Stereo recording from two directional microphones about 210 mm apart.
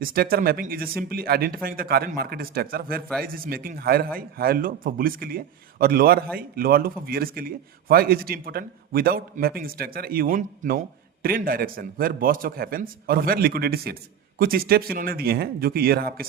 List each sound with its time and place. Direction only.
0.0 s a man's voice: 45° right (ahead or behind)